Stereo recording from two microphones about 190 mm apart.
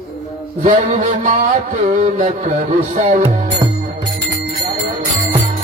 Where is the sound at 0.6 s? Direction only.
40° right (ahead or behind).